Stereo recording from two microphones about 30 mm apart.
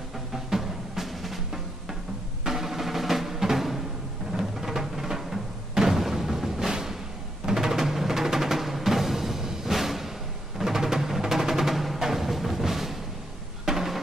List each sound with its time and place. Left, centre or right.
0.3 s music: centre